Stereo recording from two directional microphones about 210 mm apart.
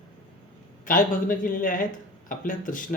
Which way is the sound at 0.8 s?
40° left (ahead or behind).